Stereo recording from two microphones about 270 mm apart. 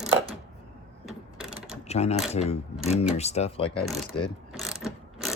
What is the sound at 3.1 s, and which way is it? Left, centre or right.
Speech, left.